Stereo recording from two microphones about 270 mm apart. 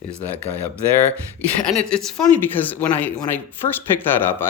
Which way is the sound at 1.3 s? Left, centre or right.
Centre.